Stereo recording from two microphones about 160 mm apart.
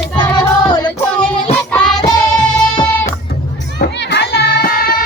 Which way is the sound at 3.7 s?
85° left.